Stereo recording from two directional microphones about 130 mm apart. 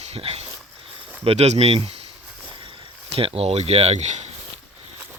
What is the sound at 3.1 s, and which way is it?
Speech, 50° right (ahead or behind).